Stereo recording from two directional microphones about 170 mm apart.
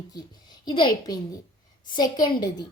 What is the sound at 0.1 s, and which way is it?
A woman's voice, 25° left (ahead or behind).